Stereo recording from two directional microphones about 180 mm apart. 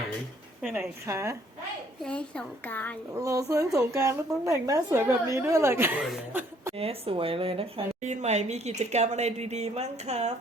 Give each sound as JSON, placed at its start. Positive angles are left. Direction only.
{"t": 0.6, "sound": "a woman's voice", "side_deg": -10}
{"t": 2.0, "sound": "a child's voice", "side_deg": 5}
{"t": 3.2, "sound": "a woman's voice", "side_deg": -15}
{"t": 6.7, "sound": "a woman's voice", "side_deg": -30}